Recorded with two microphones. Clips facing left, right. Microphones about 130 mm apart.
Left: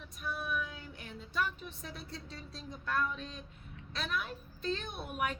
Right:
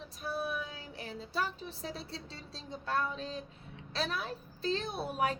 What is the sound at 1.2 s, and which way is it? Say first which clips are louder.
A woman's voice: even; 30° right (ahead or behind).